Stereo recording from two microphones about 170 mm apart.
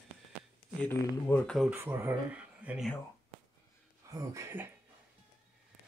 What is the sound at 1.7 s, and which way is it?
Speech, 10° right (ahead or behind).